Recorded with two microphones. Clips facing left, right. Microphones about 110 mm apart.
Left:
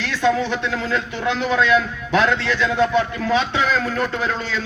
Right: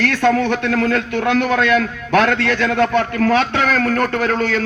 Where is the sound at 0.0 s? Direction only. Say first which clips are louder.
Right 4 dB; 55° right (ahead or behind).